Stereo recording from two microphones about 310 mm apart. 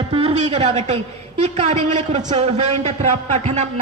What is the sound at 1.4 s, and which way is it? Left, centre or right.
A man's voice, right.